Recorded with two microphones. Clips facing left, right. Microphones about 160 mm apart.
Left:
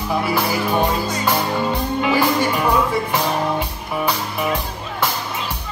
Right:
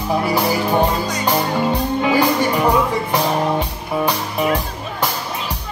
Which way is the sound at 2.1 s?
20° right (ahead or behind).